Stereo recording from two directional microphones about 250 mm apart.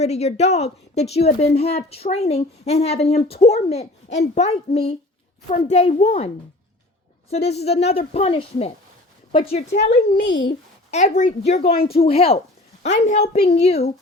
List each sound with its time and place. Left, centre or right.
0.0 s a woman's voice: left
9.9 s a child's voice: left
10.9 s a woman's voice: left
11.6 s speech: left
11.9 s a woman's voice: left